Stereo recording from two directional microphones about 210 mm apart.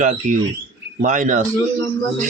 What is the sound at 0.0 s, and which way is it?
Speech, 35° right (ahead or behind).